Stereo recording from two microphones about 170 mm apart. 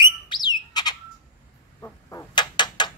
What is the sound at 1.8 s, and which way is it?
Chicken, 15° left (ahead or behind).